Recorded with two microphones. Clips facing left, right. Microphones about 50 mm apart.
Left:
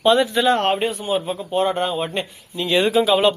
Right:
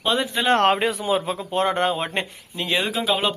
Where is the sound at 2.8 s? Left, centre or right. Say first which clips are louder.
Left 7 dB; centre.